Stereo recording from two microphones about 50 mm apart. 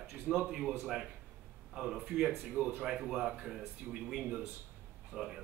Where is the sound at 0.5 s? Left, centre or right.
Centre.